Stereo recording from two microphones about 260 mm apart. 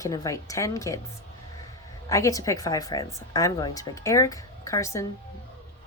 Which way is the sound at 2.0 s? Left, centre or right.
Centre.